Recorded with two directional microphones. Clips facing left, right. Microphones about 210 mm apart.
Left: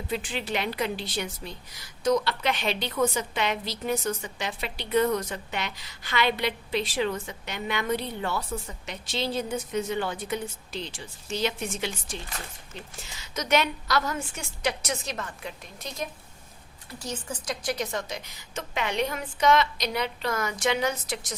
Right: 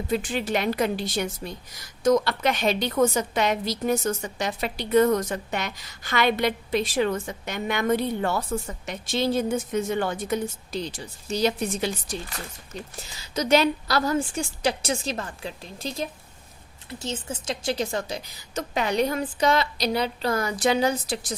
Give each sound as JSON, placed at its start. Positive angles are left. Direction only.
{"t": 0.1, "sound": "a woman's voice", "side_deg": -45}